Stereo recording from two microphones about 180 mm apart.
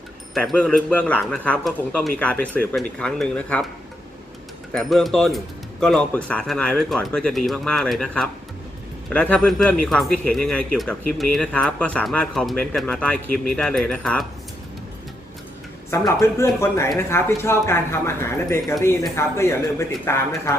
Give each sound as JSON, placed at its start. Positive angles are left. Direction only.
{"t": 0.3, "sound": "a man's voice", "side_deg": 5}
{"t": 4.7, "sound": "speech", "side_deg": 0}
{"t": 15.9, "sound": "a man's voice", "side_deg": 15}